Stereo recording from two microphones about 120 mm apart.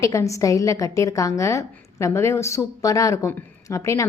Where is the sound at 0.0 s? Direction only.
25° left (ahead or behind).